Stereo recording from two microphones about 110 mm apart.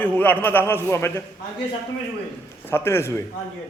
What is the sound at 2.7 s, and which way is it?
Speech, 20° left (ahead or behind).